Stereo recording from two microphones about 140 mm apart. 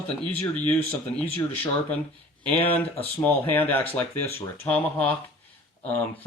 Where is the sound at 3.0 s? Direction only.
15° left (ahead or behind).